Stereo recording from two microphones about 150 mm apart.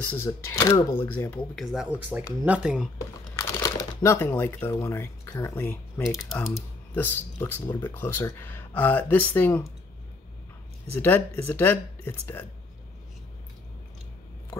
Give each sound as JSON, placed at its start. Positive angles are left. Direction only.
{"t": 0.0, "sound": "speech", "side_deg": 15}
{"t": 1.6, "sound": "speech", "side_deg": 0}
{"t": 3.3, "sound": "speech", "side_deg": 20}
{"t": 11.0, "sound": "speech", "side_deg": 15}